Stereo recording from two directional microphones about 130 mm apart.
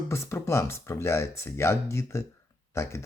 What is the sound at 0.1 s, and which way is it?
Speech, 20° left (ahead or behind).